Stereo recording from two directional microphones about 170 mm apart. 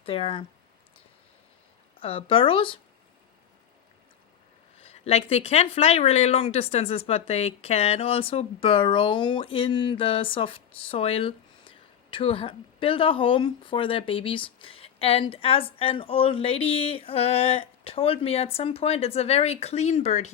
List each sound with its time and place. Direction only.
0.0 s speech: 35° left (ahead or behind)
2.0 s speech: 35° left (ahead or behind)
4.8 s speech: 35° left (ahead or behind)